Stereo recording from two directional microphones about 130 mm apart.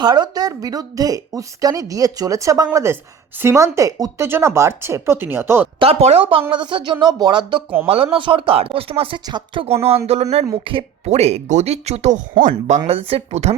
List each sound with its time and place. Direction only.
0.0 s speech: 35° right (ahead or behind)
5.8 s speech: 55° right (ahead or behind); by 9.6 s 35° right (ahead or behind)
10.1 s speech: 55° right (ahead or behind)
11.1 s speech: 55° right (ahead or behind)
12.4 s speech: 80° right
12.9 s speech: 50° right (ahead or behind)